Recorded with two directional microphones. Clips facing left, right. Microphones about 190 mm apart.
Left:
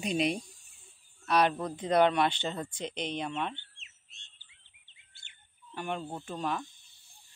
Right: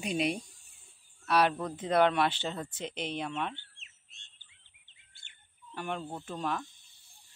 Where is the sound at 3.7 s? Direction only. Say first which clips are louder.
Left 1 dB; 50° right (ahead or behind).